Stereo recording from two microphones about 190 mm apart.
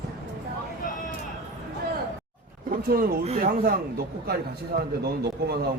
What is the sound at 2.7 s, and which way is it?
Speech, 50° right (ahead or behind).